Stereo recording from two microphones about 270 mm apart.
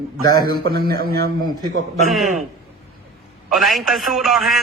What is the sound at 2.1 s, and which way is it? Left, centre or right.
Speech, centre.